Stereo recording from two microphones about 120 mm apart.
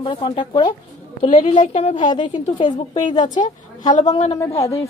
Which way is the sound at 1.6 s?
75° left (ahead or behind).